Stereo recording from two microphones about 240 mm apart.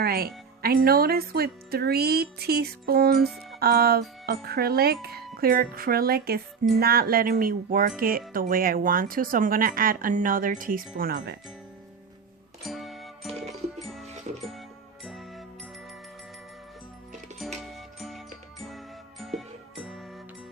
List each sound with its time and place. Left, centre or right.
0.0 s speech: right
12.6 s music: centre
17.7 s music: centre
19.2 s music: centre